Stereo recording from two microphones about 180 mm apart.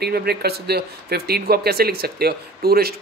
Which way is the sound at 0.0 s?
60° right (ahead or behind).